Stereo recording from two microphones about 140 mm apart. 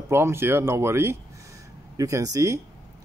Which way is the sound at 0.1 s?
20° right (ahead or behind).